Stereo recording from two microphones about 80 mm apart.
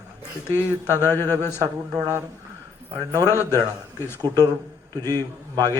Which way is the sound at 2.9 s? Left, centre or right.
Right.